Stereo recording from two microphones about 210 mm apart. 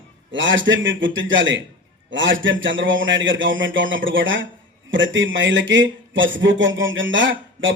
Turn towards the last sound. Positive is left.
turn(degrees=-65)  # may be behind; listen again after turning